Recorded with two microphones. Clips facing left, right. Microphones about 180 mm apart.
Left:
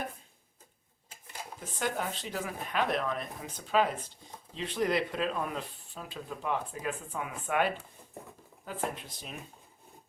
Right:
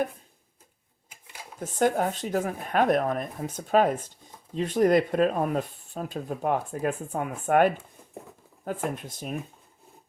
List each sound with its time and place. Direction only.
1.5 s speech: 50° right (ahead or behind)